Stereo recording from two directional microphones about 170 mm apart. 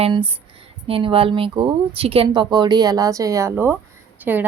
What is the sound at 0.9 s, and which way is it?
A woman's voice, 30° right (ahead or behind).